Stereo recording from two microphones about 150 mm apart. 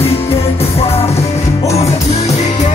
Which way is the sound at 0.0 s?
40° left (ahead or behind).